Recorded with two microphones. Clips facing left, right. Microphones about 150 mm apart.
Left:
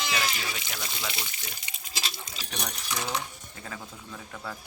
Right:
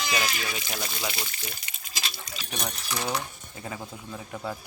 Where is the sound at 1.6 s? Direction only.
25° left (ahead or behind).